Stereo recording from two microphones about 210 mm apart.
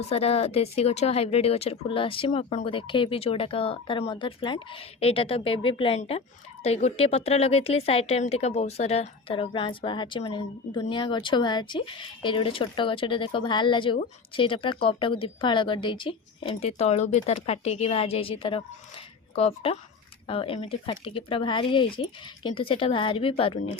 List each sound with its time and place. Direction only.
0.1 s speech: 30° left (ahead or behind)